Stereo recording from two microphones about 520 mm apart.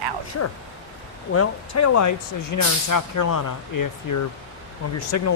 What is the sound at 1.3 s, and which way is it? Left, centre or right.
Speech, left.